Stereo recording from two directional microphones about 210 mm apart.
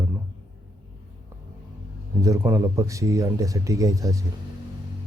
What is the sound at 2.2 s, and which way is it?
Speech, 15° right (ahead or behind).